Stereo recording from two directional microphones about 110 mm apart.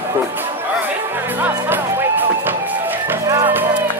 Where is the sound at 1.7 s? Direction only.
20° right (ahead or behind).